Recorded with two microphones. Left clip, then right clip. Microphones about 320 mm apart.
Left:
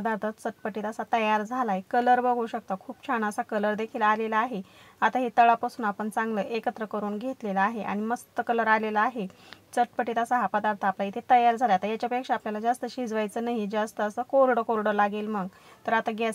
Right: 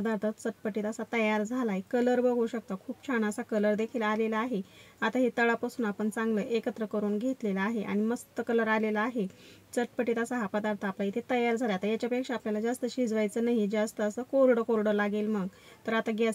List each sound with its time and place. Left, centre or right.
0.1 s speech: centre